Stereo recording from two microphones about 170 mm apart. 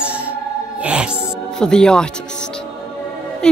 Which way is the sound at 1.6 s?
5° left (ahead or behind).